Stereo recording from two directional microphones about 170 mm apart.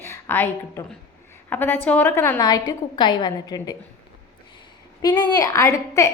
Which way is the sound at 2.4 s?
25° left (ahead or behind).